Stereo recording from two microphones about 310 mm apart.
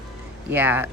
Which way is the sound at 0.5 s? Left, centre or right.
Centre.